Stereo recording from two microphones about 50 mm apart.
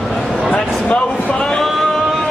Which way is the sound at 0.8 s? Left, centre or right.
Left.